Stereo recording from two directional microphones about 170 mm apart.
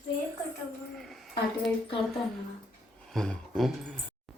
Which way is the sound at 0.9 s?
Centre (ahead or behind).